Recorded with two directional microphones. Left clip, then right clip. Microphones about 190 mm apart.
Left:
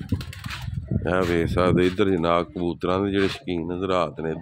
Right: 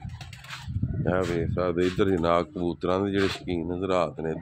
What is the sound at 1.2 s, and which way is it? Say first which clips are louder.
Speech: left 5 dB; 25° left (ahead or behind).